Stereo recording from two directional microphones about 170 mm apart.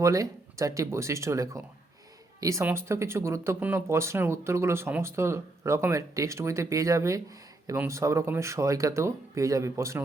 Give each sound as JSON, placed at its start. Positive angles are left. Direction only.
{"t": 0.0, "sound": "speech", "side_deg": -20}